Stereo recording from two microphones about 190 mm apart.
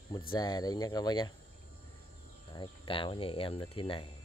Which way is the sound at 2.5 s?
25° left (ahead or behind).